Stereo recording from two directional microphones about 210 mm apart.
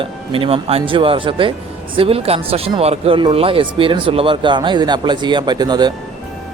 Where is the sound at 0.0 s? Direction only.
25° right (ahead or behind).